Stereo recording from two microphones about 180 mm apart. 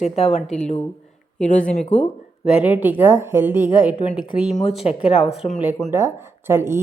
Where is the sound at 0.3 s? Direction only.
Centre (ahead or behind).